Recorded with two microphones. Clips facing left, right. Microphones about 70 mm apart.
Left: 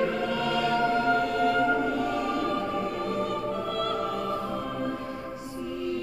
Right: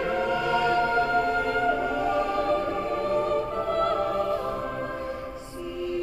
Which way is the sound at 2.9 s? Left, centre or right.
Right.